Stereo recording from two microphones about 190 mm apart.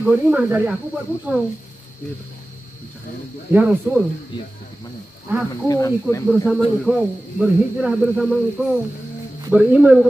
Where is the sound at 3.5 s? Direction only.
5° right (ahead or behind).